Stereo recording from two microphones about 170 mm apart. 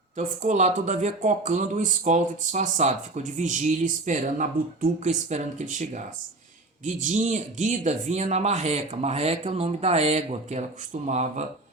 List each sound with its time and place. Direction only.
0.2 s speech: 45° right (ahead or behind)